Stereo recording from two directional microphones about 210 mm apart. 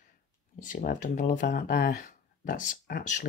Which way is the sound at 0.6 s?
40° left (ahead or behind).